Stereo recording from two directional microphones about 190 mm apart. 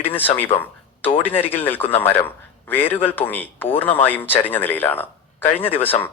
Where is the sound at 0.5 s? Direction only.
30° left (ahead or behind).